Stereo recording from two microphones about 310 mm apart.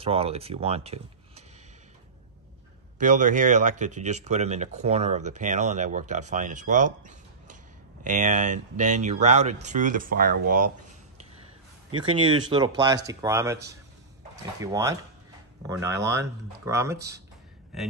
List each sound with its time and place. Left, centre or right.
0.0 s speech: centre
3.0 s speech: right
12.3 s speech: centre
14.6 s speech: centre